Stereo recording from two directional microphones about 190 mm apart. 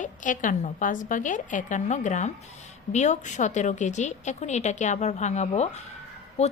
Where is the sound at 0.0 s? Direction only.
40° left (ahead or behind).